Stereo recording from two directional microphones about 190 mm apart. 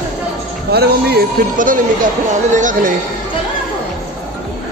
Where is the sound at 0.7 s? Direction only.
55° right (ahead or behind).